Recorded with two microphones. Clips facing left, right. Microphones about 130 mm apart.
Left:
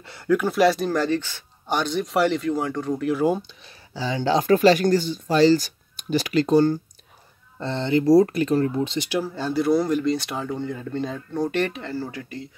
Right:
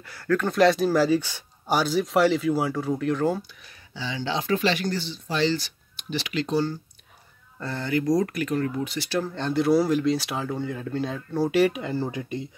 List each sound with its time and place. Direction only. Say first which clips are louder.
0.0 s speech: left 2 dB; 25° left (ahead or behind)
0.3 s speech: left 1 dB; 5° left (ahead or behind)
3.3 s speech: left 3 dB; 25° left (ahead or behind)
3.9 s speech: left 7 dB; 40° left (ahead or behind)
7.5 s speech: left 4 dB; 25° left (ahead or behind)
9.2 s speech: right 1 dB; 5° left (ahead or behind); by 12.4 s 20° right (ahead or behind)